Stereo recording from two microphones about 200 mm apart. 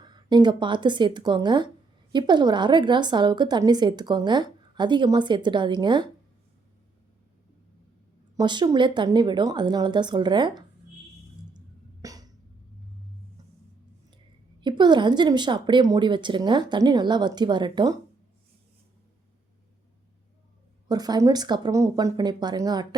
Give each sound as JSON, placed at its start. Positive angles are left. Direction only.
{"t": 0.0, "sound": "a woman's voice", "side_deg": -20}
{"t": 8.4, "sound": "a woman's voice", "side_deg": -20}
{"t": 12.0, "sound": "a sound", "side_deg": -15}
{"t": 14.6, "sound": "a woman's voice", "side_deg": -25}
{"t": 20.8, "sound": "a woman's voice", "side_deg": -20}